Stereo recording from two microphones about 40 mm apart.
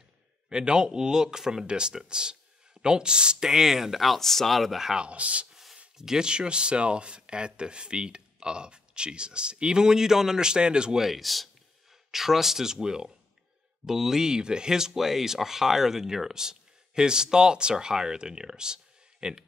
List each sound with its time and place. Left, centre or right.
0.5 s speech: right; by 4.9 s centre
4.9 s speech: right
5.5 s a sound: centre
5.9 s speech: centre
11.1 s speech: centre